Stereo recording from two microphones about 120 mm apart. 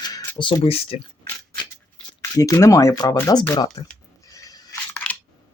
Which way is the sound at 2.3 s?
30° left (ahead or behind).